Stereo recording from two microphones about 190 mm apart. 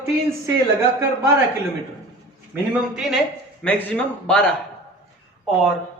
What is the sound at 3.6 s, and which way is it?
Speech, 5° left (ahead or behind).